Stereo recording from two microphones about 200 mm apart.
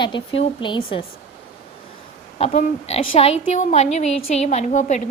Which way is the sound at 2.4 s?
35° left (ahead or behind).